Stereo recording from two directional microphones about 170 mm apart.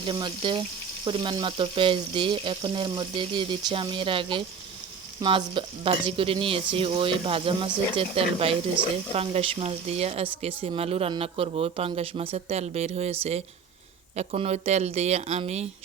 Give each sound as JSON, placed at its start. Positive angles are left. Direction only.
{"t": 0.0, "sound": "speech", "side_deg": -30}